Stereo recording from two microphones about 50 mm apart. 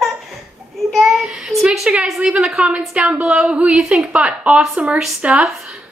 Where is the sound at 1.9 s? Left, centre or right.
Right.